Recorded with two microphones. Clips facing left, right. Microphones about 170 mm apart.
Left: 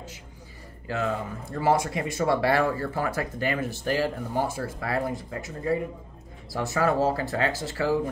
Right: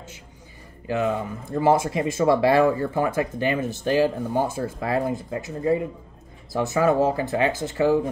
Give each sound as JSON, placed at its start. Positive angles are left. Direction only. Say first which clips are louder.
{"t": 0.8, "sound": "speech", "louder": "right 4 dB", "side_deg": -20}